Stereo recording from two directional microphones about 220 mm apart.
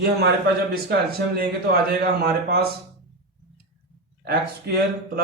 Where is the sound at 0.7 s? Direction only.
45° right (ahead or behind).